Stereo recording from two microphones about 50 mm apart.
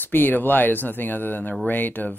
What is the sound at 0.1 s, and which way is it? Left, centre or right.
Speech, left.